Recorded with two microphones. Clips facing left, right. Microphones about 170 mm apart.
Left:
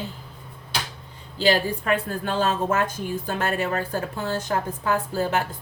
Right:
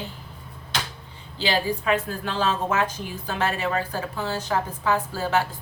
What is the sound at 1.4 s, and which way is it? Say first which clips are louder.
A woman's voice: left 3 dB; 45° left (ahead or behind).